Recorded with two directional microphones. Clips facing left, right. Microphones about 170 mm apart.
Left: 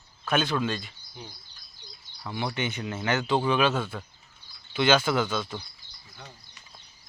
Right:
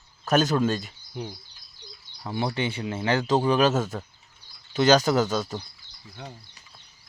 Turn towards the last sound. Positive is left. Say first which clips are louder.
# right 3 dB
turn(degrees=-40)  # may be behind; listen again after turning